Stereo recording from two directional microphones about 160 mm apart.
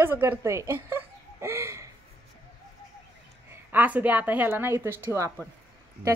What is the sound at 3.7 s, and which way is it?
A woman's voice, 10° right (ahead or behind).